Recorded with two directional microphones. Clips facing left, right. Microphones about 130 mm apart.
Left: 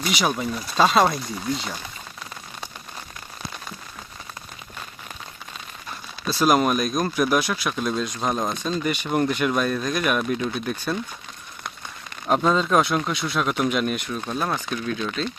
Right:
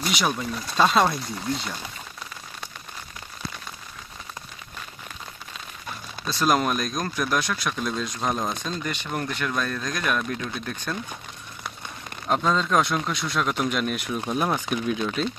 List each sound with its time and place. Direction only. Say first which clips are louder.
0.0 s speech: left 2 dB; 5° left (ahead or behind)
6.2 s speech: left 3 dB; 5° left (ahead or behind)
12.3 s speech: left 3 dB; 10° left (ahead or behind)
14.1 s speech: right 1 dB; 10° right (ahead or behind)